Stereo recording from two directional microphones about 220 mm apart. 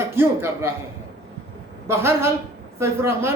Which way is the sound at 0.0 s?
10° right (ahead or behind).